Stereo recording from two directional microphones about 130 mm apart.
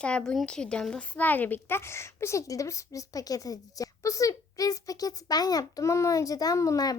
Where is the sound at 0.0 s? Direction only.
5° left (ahead or behind).